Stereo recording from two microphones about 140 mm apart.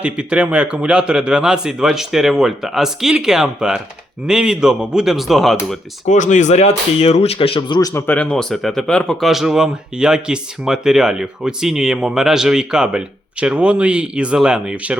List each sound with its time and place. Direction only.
0.0 s speech: 10° right (ahead or behind)
6.1 s speech: 65° left (ahead or behind); by 7.8 s 40° left (ahead or behind)
7.8 s speech: 25° left (ahead or behind)
8.0 s speech: 10° left (ahead or behind); by 14.9 s 5° right (ahead or behind)